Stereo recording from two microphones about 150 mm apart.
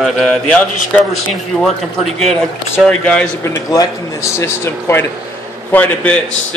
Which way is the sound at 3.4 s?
20° left (ahead or behind).